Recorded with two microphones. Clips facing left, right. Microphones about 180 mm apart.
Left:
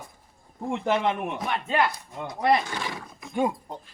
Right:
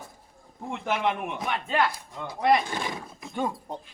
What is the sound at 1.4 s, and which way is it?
Speech, centre (ahead or behind).